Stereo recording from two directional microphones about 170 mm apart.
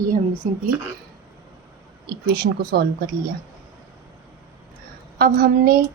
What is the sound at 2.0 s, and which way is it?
Speech, 70° right (ahead or behind).